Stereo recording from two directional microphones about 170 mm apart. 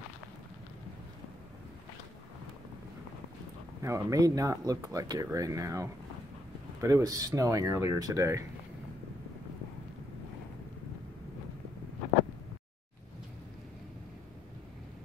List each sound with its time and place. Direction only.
3.8 s speech: 20° right (ahead or behind)